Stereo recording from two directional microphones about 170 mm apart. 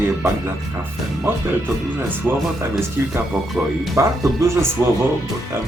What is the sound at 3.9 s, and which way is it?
Speech, 20° right (ahead or behind).